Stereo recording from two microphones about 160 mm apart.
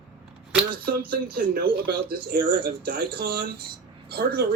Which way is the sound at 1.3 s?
75° right (ahead or behind).